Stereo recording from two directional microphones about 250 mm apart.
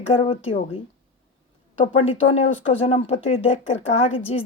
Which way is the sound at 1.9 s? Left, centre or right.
Left.